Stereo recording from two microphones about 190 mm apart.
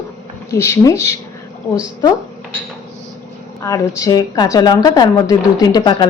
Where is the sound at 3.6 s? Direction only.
15° left (ahead or behind).